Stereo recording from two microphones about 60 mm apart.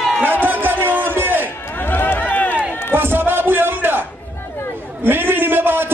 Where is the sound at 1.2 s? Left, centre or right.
Right.